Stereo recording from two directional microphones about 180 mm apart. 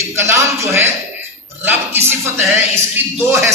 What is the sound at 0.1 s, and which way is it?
Music, 15° right (ahead or behind).